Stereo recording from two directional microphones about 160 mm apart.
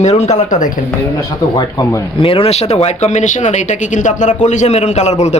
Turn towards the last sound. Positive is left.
turn(degrees=45)  # may be behind; listen again after turning